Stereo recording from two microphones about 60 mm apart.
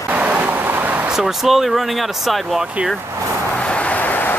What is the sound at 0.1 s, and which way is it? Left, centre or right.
Vehicle, right.